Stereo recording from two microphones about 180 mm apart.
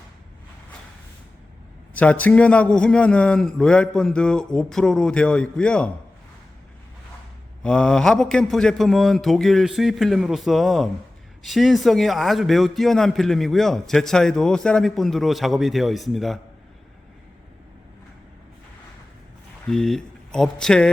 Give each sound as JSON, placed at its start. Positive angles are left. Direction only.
{"t": 1.9, "sound": "a man's voice", "side_deg": 10}
{"t": 7.6, "sound": "a man's voice", "side_deg": 5}
{"t": 19.6, "sound": "speech", "side_deg": 5}